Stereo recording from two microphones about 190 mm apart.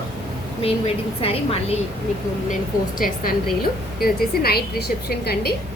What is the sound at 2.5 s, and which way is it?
A woman's voice, 45° left (ahead or behind).